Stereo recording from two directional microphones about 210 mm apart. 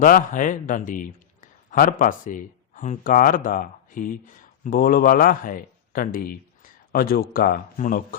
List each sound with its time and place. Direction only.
0.0 s a man's voice: 40° left (ahead or behind)